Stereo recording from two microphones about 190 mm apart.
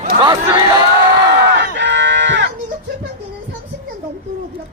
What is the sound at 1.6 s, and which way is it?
Livestock, 65° right (ahead or behind).